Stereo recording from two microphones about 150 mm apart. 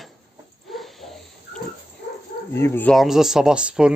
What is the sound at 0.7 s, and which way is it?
Pig, centre (ahead or behind).